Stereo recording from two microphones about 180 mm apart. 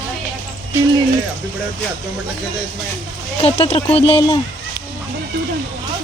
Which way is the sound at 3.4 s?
35° left (ahead or behind).